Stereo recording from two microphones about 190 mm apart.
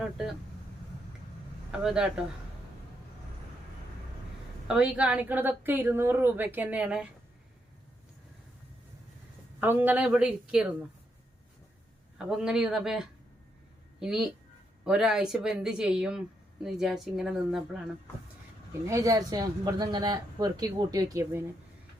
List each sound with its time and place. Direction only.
0.0 s speech: centre (ahead or behind)
1.7 s speech: 5° right (ahead or behind)
4.7 s a woman's voice: 5° right (ahead or behind)
9.6 s a woman's voice: 10° right (ahead or behind)
12.1 s speech: 5° right (ahead or behind)
18.7 s speech: 15° right (ahead or behind)